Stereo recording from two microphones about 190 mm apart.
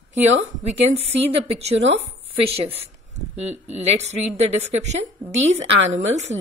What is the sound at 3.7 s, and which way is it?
A woman's voice, 35° right (ahead or behind).